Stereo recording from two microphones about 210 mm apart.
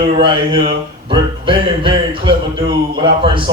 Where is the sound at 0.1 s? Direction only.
25° right (ahead or behind).